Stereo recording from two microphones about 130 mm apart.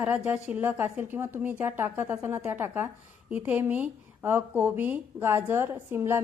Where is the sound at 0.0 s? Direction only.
10° right (ahead or behind).